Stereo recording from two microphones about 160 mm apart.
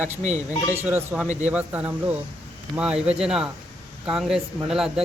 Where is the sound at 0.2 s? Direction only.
50° right (ahead or behind).